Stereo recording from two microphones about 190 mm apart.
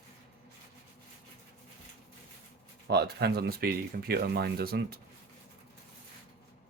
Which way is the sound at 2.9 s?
60° right (ahead or behind).